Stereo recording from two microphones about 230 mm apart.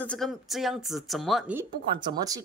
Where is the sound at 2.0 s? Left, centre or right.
Centre.